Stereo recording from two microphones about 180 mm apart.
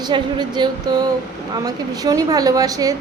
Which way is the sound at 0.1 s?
25° right (ahead or behind).